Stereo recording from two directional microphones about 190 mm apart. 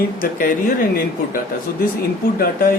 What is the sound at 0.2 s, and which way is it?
Speech, 45° left (ahead or behind).